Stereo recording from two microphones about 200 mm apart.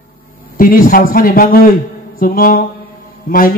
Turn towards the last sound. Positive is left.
turn(degrees=45)  # may be behind; listen again after turning